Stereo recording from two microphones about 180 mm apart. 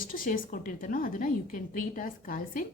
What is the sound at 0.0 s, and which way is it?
A woman's voice, 50° left (ahead or behind).